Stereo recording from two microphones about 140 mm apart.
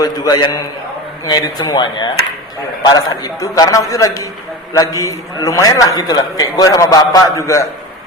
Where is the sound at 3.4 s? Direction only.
25° left (ahead or behind).